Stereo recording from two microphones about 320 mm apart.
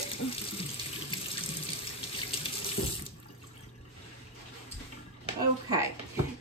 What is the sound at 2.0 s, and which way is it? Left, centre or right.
Water tap, centre.